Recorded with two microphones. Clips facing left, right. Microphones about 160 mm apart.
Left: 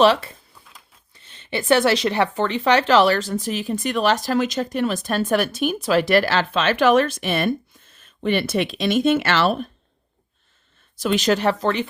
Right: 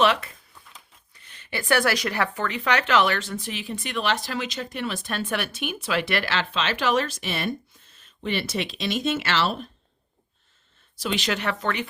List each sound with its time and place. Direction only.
0.0 s speech: 30° left (ahead or behind)
0.5 s a sound: 5° left (ahead or behind)
1.1 s speech: 25° left (ahead or behind); by 9.6 s 55° left (ahead or behind)
10.9 s speech: 45° left (ahead or behind)